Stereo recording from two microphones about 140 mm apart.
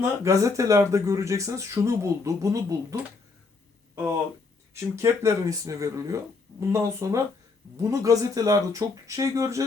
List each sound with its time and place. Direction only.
0.0 s speech: 20° right (ahead or behind)
4.7 s speech: 20° right (ahead or behind)